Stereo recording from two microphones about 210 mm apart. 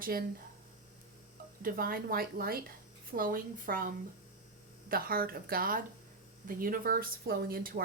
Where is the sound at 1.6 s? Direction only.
45° right (ahead or behind).